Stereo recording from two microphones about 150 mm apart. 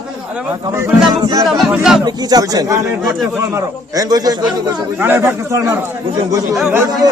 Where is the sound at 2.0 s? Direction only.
25° right (ahead or behind).